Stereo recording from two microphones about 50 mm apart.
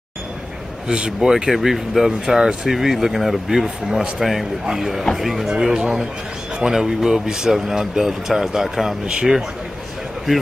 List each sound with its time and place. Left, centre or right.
0.8 s speech: centre
1.3 s speech: centre
5.5 s speech: centre